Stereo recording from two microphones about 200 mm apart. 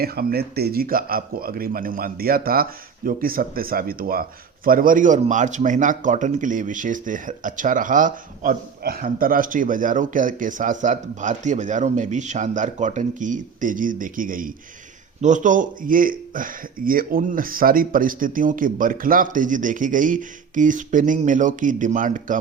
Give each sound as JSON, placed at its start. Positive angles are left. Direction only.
{"t": 0.0, "sound": "speech", "side_deg": -50}